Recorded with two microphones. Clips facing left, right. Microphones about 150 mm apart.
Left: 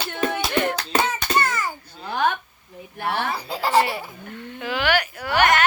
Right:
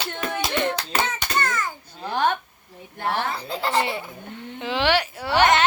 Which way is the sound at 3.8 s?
25° right (ahead or behind).